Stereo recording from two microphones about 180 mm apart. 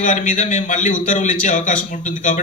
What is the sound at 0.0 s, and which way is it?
A man's voice, 45° left (ahead or behind).